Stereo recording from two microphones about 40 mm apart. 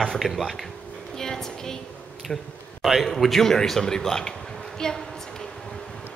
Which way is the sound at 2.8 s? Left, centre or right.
Centre.